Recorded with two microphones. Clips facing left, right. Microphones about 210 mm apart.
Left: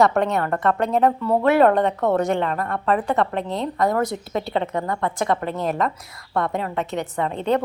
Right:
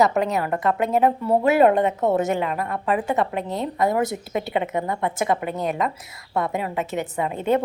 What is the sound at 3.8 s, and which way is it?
Speech, 25° right (ahead or behind).